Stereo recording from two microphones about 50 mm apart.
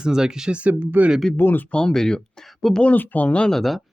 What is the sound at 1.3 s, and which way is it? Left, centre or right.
Speech, left.